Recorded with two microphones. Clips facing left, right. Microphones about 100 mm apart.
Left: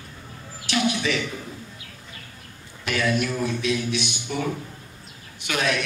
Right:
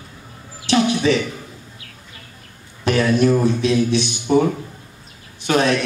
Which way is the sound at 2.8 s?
35° right (ahead or behind).